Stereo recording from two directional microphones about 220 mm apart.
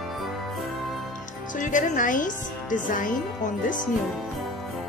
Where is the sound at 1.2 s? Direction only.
35° left (ahead or behind).